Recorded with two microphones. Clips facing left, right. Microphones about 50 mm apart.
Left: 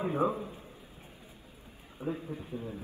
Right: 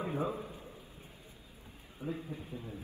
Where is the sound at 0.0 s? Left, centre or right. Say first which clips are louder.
Left 6 dB; left.